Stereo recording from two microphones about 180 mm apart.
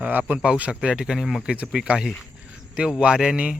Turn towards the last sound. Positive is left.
turn(degrees=-5)  # may be behind; listen again after turning